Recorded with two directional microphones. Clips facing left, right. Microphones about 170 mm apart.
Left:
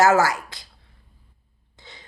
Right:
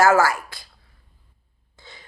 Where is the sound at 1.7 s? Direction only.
20° left (ahead or behind).